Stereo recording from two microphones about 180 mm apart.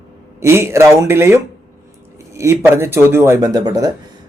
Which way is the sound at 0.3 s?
15° right (ahead or behind).